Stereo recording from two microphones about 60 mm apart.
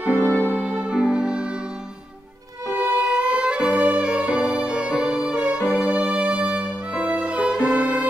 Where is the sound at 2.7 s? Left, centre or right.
Right.